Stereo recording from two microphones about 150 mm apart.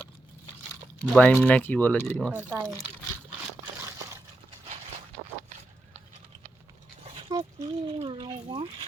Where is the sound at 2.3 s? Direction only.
15° right (ahead or behind).